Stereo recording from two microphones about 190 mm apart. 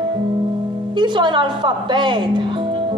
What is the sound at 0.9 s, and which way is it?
A woman's voice, 25° right (ahead or behind).